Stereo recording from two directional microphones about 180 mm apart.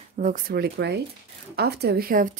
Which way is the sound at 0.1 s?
45° right (ahead or behind).